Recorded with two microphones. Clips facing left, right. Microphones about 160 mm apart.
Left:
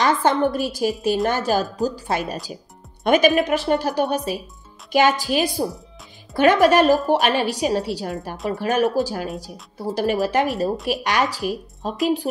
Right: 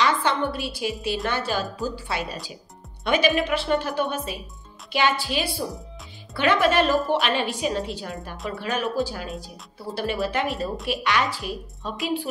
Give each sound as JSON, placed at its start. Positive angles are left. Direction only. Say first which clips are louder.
{"t": 0.0, "sound": "a woman's voice", "louder": "left 5 dB", "side_deg": 45}